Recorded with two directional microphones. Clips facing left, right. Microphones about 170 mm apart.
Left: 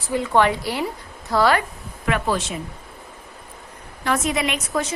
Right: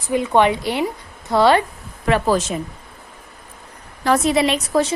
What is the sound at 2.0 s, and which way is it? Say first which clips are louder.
Speech: right 5 dB; 35° right (ahead or behind).